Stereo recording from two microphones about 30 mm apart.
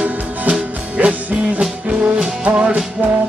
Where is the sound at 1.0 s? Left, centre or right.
Right.